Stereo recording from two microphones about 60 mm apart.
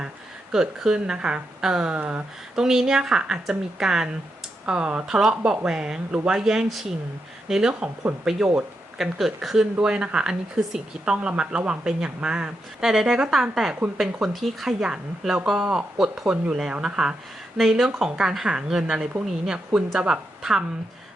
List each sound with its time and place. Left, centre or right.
0.5 s speech: centre
2.0 s speech: right
2.6 s speech: centre
9.8 s speech: centre